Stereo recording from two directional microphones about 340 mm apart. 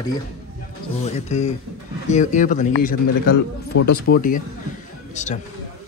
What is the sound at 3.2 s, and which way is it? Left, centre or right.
Speech, left.